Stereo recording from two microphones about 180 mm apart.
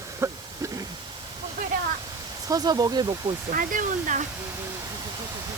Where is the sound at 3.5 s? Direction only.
50° right (ahead or behind).